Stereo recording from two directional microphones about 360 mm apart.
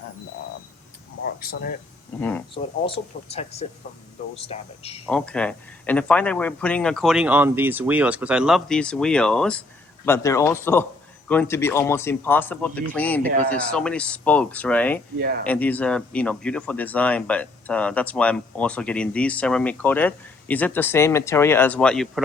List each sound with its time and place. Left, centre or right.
1.4 s speech: left
2.8 s speech: centre
5.0 s speech: centre
15.2 s speech: right
15.4 s speech: centre